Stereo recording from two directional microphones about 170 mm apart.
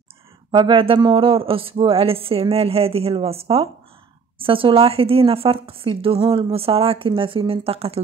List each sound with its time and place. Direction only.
0.5 s speech: 25° right (ahead or behind)